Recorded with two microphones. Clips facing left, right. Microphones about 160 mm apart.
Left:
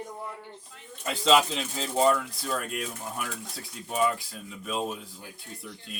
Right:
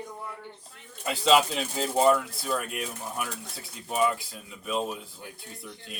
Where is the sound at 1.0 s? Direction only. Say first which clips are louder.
Right 1 dB; 5° right (ahead or behind).